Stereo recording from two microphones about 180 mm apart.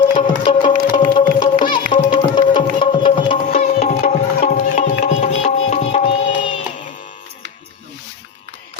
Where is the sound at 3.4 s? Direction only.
50° left (ahead or behind).